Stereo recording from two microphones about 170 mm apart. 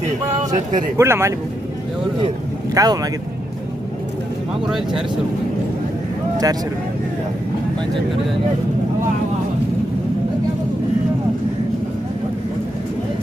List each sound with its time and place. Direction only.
0.5 s speech: 45° right (ahead or behind)
0.9 s speech: 15° right (ahead or behind)
2.7 s speech: 20° right (ahead or behind)
6.3 s speech: 20° right (ahead or behind)